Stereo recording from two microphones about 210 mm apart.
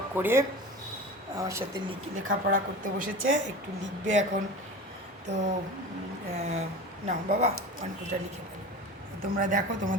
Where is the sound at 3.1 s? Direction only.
70° right (ahead or behind).